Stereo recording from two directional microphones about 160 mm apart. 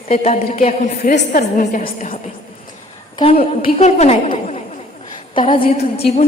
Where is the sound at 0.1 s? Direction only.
40° left (ahead or behind).